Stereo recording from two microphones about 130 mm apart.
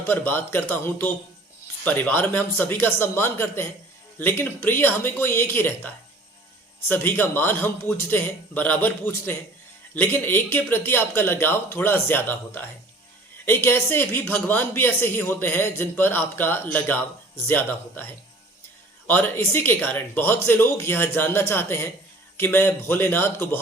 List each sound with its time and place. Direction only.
0.1 s a man's voice: 15° left (ahead or behind)